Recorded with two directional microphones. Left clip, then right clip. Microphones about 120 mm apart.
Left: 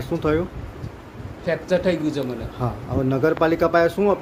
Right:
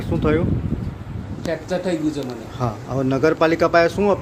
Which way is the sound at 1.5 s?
15° left (ahead or behind).